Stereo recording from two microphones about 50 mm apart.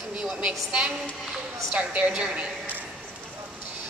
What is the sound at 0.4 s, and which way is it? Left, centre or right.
A woman's voice, right.